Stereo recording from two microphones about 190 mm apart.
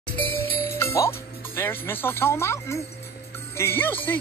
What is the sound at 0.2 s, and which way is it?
Music, 10° left (ahead or behind).